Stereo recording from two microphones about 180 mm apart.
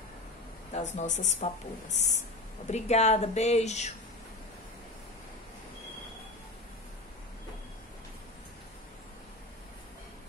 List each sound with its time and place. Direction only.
0.7 s speech: 40° left (ahead or behind)